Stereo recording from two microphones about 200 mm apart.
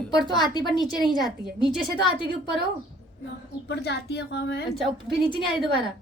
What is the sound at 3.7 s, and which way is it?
Speech, 55° left (ahead or behind).